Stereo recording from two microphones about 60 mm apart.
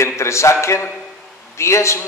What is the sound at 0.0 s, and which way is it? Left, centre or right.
A man's voice, left.